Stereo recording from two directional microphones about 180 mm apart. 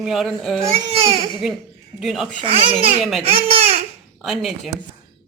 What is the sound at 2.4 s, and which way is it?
Speech, 30° right (ahead or behind).